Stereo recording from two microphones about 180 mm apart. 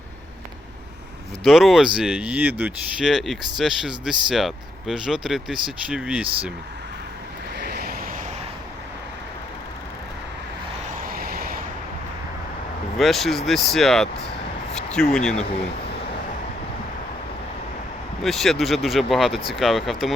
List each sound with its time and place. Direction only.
1.5 s speech: centre (ahead or behind)
7.6 s vehicle: 60° right (ahead or behind)
11.1 s vehicle: 55° right (ahead or behind)
13.0 s speech: centre (ahead or behind)
18.2 s speech: centre (ahead or behind)